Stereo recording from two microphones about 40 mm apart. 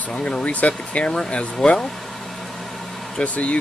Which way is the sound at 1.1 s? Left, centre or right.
Left.